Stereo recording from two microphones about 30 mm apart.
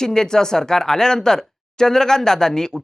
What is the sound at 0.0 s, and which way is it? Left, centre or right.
Speech, left.